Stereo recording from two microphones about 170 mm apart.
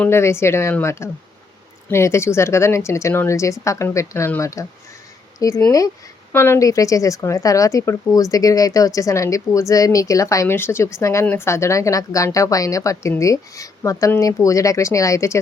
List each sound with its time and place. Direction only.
0.0 s a woman's voice: 15° left (ahead or behind)